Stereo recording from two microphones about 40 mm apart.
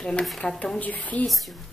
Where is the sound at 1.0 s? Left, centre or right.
Left.